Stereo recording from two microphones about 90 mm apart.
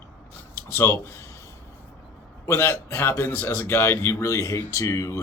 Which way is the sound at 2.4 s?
30° left (ahead or behind).